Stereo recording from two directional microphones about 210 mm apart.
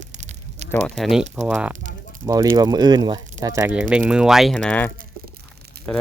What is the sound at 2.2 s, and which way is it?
Speech, 20° right (ahead or behind).